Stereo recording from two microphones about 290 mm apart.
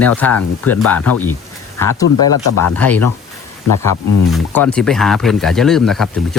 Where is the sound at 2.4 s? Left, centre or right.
Left.